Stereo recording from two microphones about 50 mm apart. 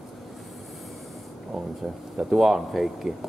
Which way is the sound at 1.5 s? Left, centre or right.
Centre.